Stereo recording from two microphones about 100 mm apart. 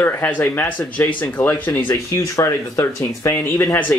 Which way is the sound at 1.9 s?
30° left (ahead or behind).